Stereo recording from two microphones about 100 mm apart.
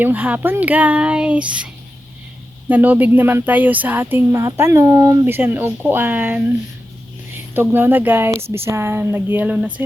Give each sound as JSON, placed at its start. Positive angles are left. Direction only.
{"t": 0.0, "sound": "a woman's voice", "side_deg": -20}
{"t": 7.5, "sound": "a woman's voice", "side_deg": -20}